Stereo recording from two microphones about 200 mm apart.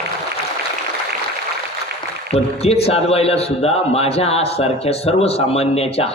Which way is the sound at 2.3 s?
30° left (ahead or behind).